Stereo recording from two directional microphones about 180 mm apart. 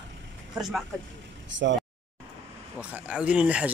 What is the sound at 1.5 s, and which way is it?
Speech, 90° right.